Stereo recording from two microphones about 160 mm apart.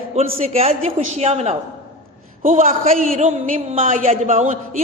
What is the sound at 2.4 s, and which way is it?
A man's voice, 55° right (ahead or behind).